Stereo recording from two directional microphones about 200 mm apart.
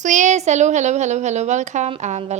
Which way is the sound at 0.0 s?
40° right (ahead or behind).